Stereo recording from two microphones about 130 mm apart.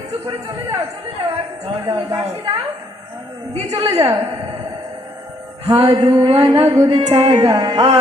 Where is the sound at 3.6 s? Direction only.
30° right (ahead or behind).